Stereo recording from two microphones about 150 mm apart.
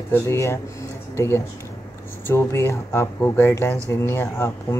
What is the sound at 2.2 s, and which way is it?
Speech, 15° left (ahead or behind).